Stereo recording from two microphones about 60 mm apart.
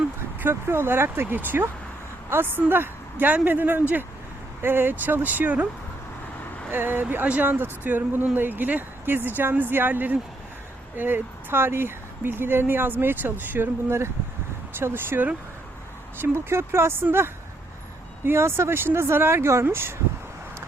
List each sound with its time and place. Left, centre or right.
0.3 s speech: right
6.7 s speech: right
14.8 s speech: right